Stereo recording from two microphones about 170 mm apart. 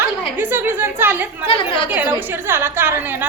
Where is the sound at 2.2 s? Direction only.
10° right (ahead or behind).